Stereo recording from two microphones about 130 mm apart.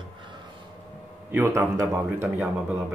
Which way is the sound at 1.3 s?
20° right (ahead or behind).